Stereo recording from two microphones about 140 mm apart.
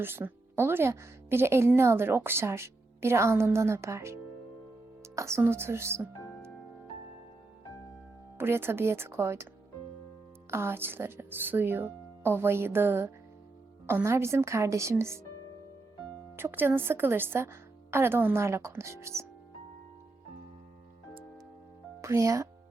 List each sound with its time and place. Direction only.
0.0 s a woman's voice: 15° right (ahead or behind)
8.4 s a woman's voice: 15° right (ahead or behind)
10.5 s a woman's voice: 15° right (ahead or behind)
16.3 s a woman's voice: 15° right (ahead or behind)
22.0 s speech: 20° right (ahead or behind)